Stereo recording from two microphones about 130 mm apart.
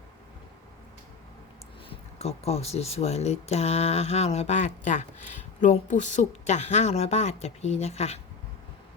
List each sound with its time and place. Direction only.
1.9 s speech: 50° left (ahead or behind)